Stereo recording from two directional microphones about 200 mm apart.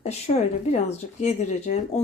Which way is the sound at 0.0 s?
35° left (ahead or behind).